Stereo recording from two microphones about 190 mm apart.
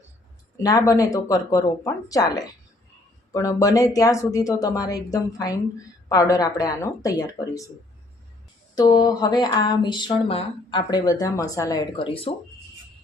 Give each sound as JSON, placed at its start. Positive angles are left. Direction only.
{"t": 0.5, "sound": "speech", "side_deg": 20}
{"t": 8.7, "sound": "speech", "side_deg": 20}